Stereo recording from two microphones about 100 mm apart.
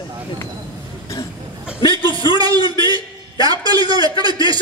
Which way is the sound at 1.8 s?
55° left (ahead or behind).